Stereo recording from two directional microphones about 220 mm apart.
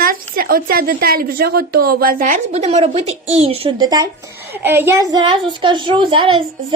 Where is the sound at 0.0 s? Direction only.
40° right (ahead or behind).